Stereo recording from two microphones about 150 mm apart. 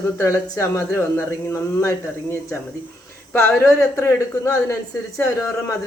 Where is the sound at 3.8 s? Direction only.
20° left (ahead or behind).